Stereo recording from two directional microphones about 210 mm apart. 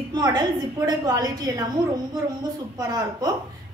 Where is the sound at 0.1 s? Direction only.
20° right (ahead or behind).